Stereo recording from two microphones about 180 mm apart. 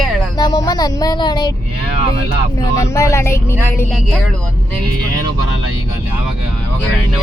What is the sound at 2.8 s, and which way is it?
Speech, 15° left (ahead or behind).